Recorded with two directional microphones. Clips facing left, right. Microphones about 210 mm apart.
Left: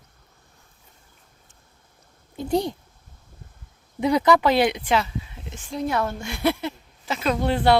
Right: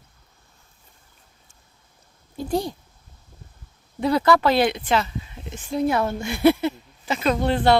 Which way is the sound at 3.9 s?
15° left (ahead or behind).